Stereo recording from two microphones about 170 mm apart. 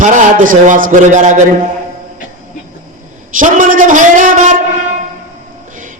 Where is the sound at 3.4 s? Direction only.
50° right (ahead or behind).